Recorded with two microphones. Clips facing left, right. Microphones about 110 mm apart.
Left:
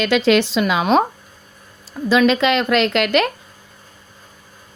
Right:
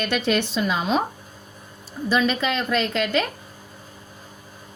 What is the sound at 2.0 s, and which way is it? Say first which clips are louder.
A woman's voice: left 7 dB; 90° left.